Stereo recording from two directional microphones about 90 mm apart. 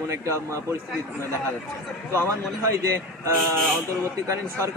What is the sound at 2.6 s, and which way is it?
Speech, 30° right (ahead or behind).